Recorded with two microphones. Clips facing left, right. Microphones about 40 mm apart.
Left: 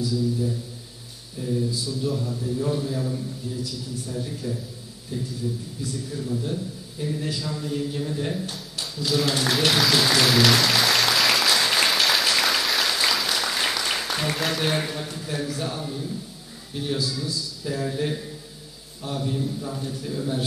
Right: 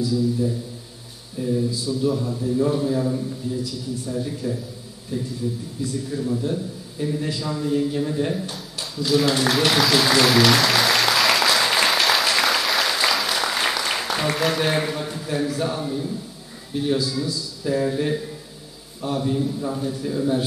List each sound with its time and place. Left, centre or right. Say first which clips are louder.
0.0 s a man's voice: right 3 dB; centre
1.5 s a man's voice: right 3 dB; centre
6.1 s a man's voice: right 4 dB; centre
9.5 s applause: even; centre
14.4 s a man's voice: right 4 dB; centre